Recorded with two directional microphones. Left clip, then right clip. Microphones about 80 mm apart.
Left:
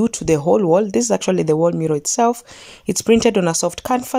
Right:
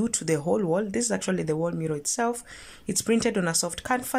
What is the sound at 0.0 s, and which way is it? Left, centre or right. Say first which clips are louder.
Speech: left 10 dB; left.